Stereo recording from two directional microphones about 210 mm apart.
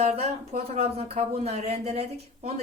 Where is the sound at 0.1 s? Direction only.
30° right (ahead or behind).